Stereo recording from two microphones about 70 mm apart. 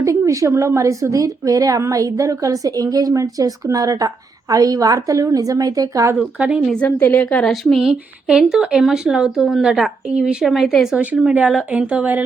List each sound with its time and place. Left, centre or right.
0.0 s a woman's voice: right
6.1 s speech: centre
6.8 s a woman's voice: left
7.4 s speech: centre
10.9 s speech: centre